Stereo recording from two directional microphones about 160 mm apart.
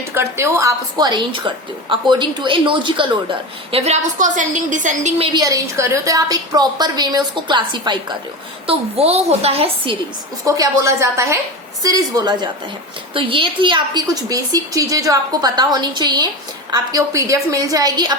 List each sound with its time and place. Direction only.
0.1 s a woman's voice: 15° right (ahead or behind); by 5.4 s 35° right (ahead or behind)
5.4 s a woman's voice: 20° right (ahead or behind)
8.6 s a woman's voice: 40° right (ahead or behind)
10.4 s a woman's voice: 20° right (ahead or behind)